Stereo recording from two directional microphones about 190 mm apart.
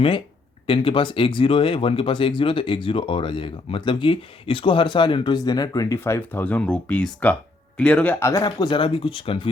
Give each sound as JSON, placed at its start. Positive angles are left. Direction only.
{"t": 0.7, "sound": "speech", "side_deg": 25}